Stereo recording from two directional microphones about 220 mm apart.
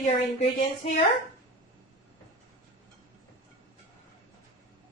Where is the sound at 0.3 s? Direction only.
30° left (ahead or behind).